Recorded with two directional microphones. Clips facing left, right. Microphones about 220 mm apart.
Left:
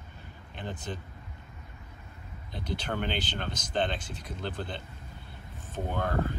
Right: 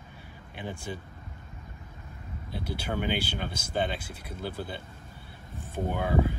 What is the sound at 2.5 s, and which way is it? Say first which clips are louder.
Speech: right 1 dB; 10° right (ahead or behind).